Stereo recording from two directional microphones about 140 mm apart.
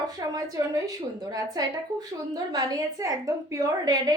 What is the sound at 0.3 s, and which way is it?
A woman's voice, 25° right (ahead or behind).